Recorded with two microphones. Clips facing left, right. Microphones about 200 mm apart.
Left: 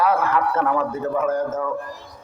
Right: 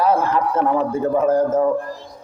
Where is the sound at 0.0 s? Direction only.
30° right (ahead or behind).